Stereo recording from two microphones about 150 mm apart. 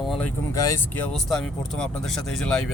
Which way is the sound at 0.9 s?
Centre (ahead or behind).